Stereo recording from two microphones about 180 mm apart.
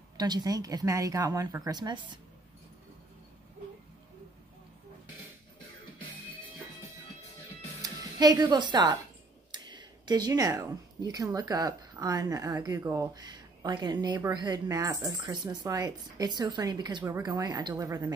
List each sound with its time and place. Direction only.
0.2 s speech: 20° right (ahead or behind)
7.8 s a child's voice: 20° right (ahead or behind)